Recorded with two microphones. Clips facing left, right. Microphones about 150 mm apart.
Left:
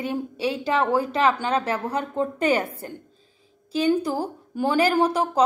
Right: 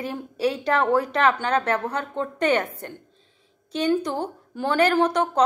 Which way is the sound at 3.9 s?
5° left (ahead or behind).